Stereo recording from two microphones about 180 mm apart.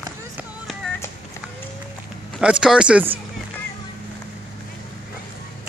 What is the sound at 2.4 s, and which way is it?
Speech, 5° right (ahead or behind).